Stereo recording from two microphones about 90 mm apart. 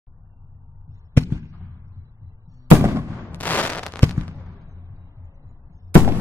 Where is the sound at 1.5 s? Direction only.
30° left (ahead or behind).